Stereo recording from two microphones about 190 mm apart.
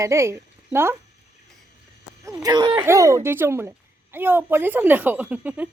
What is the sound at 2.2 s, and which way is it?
A woman's voice, 20° right (ahead or behind).